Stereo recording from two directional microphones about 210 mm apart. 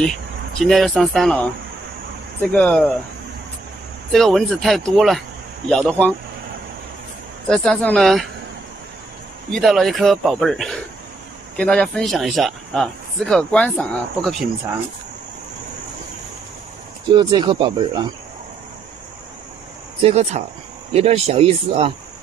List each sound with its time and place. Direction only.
0.6 s speech: centre (ahead or behind)
2.5 s speech: 5° left (ahead or behind)
4.1 s speech: centre (ahead or behind)
7.4 s speech: 5° left (ahead or behind)
9.5 s speech: centre (ahead or behind)
17.1 s speech: 20° right (ahead or behind)
20.0 s speech: 30° right (ahead or behind)